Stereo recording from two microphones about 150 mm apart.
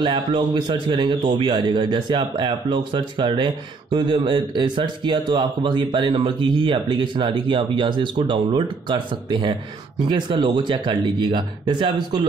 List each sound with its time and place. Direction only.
0.0 s speech: 35° right (ahead or behind)